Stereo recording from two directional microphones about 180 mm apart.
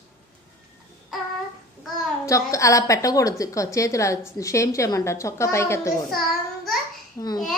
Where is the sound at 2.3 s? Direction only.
15° left (ahead or behind).